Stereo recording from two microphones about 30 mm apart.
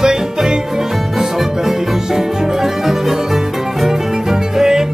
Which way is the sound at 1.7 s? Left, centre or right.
Centre.